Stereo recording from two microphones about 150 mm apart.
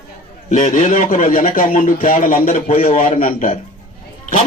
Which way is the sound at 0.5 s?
55° left (ahead or behind).